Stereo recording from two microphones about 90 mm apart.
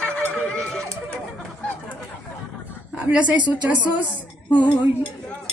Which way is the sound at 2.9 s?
20° right (ahead or behind).